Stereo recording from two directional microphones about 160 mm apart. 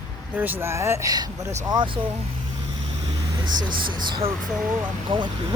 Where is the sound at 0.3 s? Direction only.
15° right (ahead or behind).